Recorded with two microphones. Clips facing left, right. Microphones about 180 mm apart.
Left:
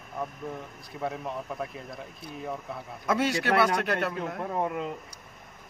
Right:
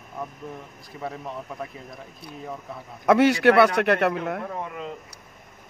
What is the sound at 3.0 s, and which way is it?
A man's voice, 70° right (ahead or behind).